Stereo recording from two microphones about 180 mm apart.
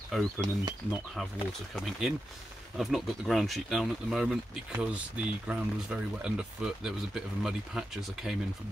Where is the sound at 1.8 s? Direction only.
Centre (ahead or behind).